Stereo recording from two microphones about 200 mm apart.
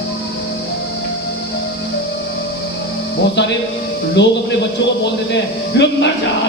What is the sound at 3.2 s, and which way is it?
A man's voice, 60° left (ahead or behind).